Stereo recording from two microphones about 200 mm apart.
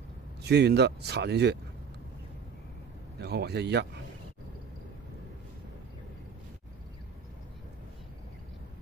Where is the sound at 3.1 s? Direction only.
55° right (ahead or behind).